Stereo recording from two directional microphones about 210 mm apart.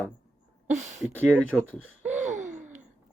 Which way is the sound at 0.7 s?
35° right (ahead or behind).